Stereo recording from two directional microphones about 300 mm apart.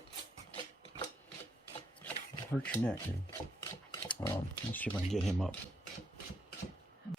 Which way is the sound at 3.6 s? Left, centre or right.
Centre.